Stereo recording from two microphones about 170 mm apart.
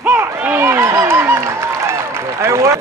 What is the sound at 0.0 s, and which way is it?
Applause, 15° right (ahead or behind).